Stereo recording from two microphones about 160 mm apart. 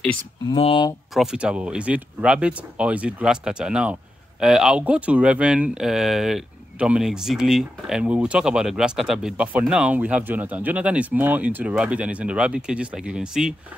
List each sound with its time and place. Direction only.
0.5 s speech: 30° left (ahead or behind)
1.1 s speech: 5° right (ahead or behind)